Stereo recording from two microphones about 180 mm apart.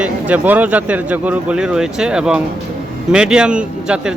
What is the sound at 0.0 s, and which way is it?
Speech, 10° right (ahead or behind).